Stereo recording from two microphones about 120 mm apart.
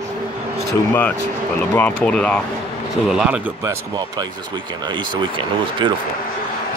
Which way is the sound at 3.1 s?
5° right (ahead or behind).